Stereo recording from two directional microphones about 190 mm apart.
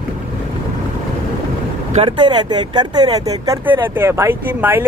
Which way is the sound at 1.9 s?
25° right (ahead or behind).